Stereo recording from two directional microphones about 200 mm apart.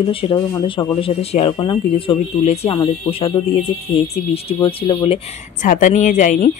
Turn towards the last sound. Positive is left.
turn(degrees=40)  # may be behind; listen again after turning